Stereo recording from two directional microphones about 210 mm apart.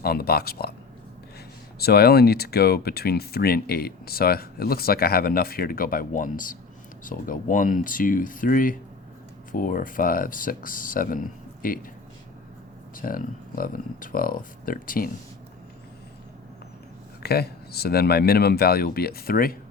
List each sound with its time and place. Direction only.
0.0 s speech: 45° left (ahead or behind)
1.8 s speech: 50° left (ahead or behind)
13.0 s speech: 40° left (ahead or behind)
17.2 s speech: 50° left (ahead or behind)